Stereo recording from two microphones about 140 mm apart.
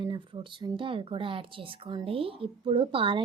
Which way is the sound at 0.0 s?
30° right (ahead or behind).